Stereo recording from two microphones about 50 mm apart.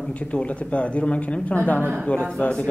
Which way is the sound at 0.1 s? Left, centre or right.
Left.